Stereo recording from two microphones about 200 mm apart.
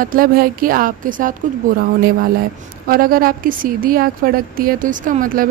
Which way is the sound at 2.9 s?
45° right (ahead or behind).